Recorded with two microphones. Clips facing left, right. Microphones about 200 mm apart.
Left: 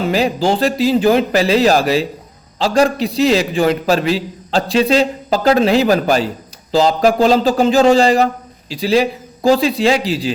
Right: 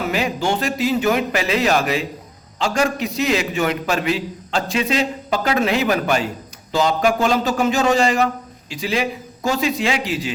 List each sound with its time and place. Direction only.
0.0 s a man's voice: 35° left (ahead or behind)